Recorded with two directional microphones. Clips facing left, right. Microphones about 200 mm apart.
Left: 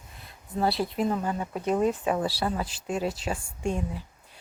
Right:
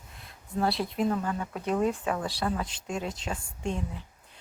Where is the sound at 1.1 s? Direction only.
20° left (ahead or behind).